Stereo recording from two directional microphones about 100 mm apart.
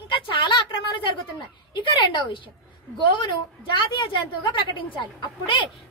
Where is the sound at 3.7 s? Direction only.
55° left (ahead or behind).